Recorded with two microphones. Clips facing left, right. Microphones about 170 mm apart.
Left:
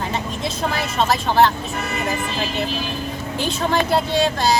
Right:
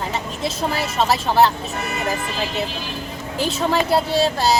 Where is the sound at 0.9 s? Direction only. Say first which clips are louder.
Even; 5° right (ahead or behind).